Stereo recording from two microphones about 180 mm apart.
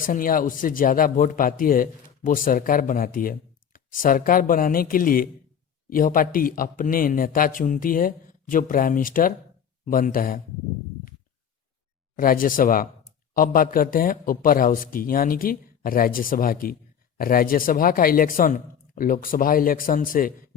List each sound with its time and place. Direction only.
0.0 s speech: 50° left (ahead or behind)
12.1 s speech: 50° left (ahead or behind)